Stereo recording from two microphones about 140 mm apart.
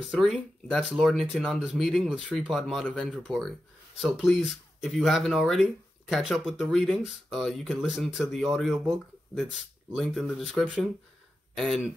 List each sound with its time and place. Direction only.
0.0 s speech: 5° left (ahead or behind)